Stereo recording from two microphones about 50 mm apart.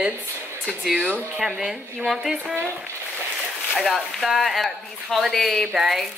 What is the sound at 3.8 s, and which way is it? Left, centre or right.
Speech, centre.